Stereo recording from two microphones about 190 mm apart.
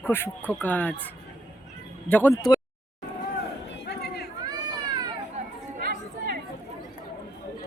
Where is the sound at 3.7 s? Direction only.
60° left (ahead or behind).